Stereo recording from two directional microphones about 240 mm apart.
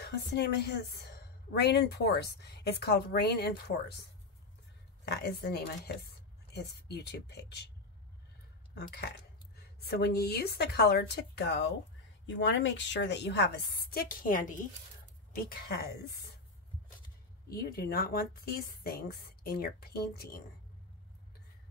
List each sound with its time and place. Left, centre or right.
0.0 s a woman's voice: left
5.0 s a woman's voice: left
8.7 s a woman's voice: left
17.5 s a woman's voice: left